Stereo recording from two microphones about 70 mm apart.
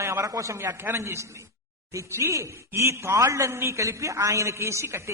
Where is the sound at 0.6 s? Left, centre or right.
Right.